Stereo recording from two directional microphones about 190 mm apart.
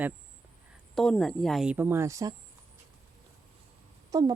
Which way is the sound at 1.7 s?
10° right (ahead or behind).